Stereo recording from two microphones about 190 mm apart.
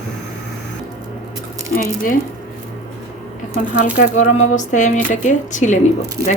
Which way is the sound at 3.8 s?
40° left (ahead or behind).